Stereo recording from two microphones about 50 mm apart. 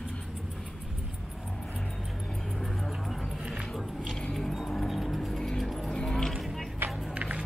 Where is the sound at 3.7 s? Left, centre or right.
Centre.